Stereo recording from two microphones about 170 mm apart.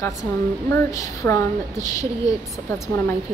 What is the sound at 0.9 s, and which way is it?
A woman's voice, 20° left (ahead or behind).